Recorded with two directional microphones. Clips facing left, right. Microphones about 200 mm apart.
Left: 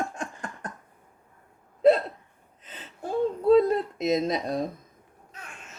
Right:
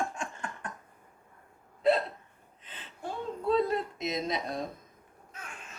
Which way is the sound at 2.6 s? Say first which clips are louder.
Left 5 dB; 40° left (ahead or behind).